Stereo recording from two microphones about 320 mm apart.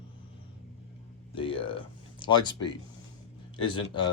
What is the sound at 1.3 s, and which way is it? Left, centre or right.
Speech, centre.